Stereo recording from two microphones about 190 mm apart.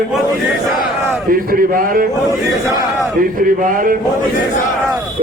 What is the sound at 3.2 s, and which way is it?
Speech, 50° right (ahead or behind).